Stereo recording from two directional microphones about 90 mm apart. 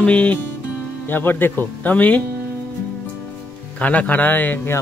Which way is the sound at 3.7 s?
15° left (ahead or behind).